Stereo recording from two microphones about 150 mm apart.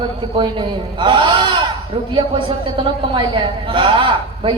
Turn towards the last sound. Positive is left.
turn(degrees=-35)  # may be behind; listen again after turning